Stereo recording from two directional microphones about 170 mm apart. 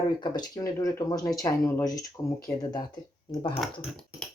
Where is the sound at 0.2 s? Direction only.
20° left (ahead or behind).